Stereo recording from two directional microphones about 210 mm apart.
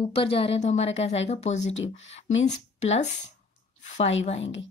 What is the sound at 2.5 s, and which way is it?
Speech, 30° left (ahead or behind).